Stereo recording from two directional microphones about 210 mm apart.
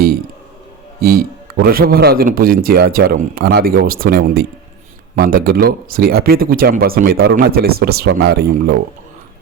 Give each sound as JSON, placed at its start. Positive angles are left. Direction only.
{"t": 1.0, "sound": "a man's voice", "side_deg": -45}